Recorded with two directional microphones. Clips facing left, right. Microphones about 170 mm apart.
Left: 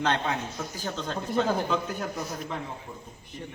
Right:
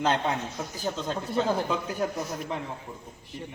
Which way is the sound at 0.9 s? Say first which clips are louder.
Right 2 dB; 5° right (ahead or behind).